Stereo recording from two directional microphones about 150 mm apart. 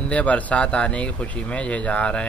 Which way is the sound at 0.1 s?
10° left (ahead or behind).